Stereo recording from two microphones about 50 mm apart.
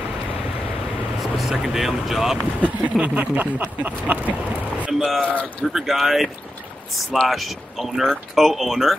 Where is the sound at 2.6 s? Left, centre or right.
Right.